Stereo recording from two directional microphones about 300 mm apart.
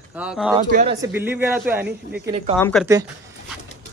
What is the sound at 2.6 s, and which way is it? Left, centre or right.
Speech, centre.